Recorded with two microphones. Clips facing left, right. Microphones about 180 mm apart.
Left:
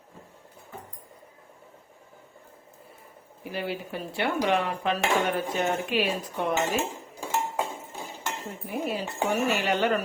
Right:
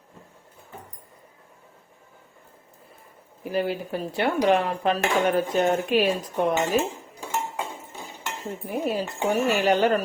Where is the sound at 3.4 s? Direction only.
45° right (ahead or behind).